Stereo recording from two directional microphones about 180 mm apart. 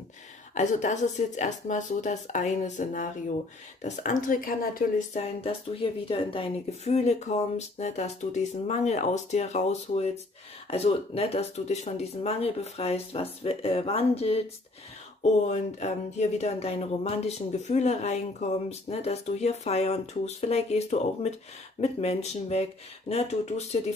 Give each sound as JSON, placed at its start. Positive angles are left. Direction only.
{"t": 0.6, "sound": "speech", "side_deg": 40}
{"t": 15.5, "sound": "speech", "side_deg": 40}